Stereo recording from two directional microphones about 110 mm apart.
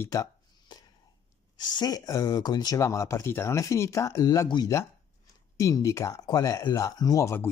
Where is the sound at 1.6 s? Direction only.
40° left (ahead or behind).